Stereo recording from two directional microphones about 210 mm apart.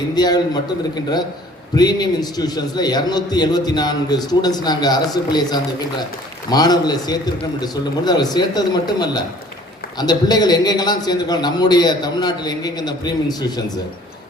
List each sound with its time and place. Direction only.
0.2 s a man's voice: 20° left (ahead or behind)
1.7 s a man's voice: 20° left (ahead or behind)